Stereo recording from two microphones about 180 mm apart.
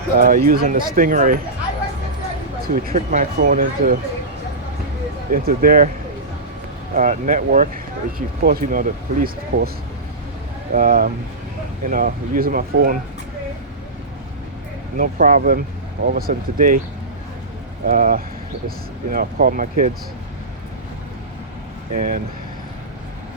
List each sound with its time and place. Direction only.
0.2 s speech: 55° right (ahead or behind)
2.6 s speech: 55° right (ahead or behind)
5.3 s speech: 55° right (ahead or behind)
6.9 s speech: 45° right (ahead or behind)
8.4 s speech: 55° right (ahead or behind)
10.7 s speech: 50° right (ahead or behind)
14.9 s speech: 50° right (ahead or behind)
17.8 s speech: 50° right (ahead or behind)
21.9 s speech: 50° right (ahead or behind)